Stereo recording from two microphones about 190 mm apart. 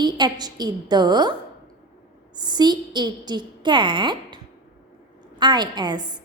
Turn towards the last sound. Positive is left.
turn(degrees=-25)  # may be behind; listen again after turning